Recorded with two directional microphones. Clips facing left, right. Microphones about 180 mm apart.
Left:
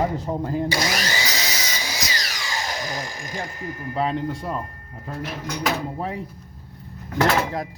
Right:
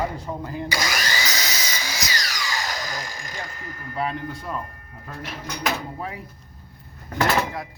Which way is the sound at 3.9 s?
35° left (ahead or behind).